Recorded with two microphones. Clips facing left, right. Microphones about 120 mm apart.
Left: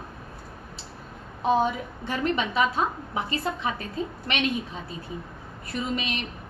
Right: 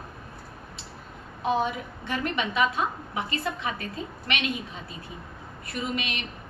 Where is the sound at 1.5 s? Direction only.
35° left (ahead or behind).